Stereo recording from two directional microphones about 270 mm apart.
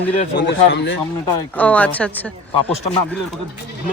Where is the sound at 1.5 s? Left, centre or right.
Centre.